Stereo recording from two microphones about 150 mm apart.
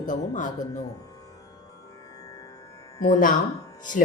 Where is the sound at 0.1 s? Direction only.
60° left (ahead or behind).